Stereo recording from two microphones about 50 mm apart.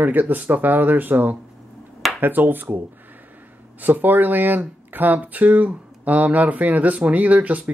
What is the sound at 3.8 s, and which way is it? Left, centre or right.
Speech, right.